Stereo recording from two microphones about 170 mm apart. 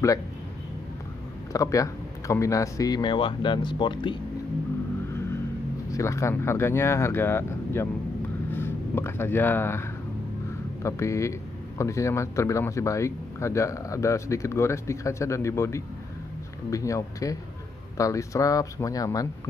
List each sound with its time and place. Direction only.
1.5 s speech: 20° left (ahead or behind)
5.9 s speech: 20° left (ahead or behind)